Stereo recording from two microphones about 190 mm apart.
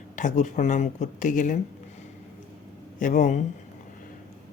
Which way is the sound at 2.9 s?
40° left (ahead or behind).